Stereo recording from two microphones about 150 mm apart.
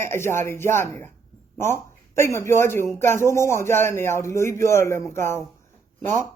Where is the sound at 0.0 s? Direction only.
15° left (ahead or behind).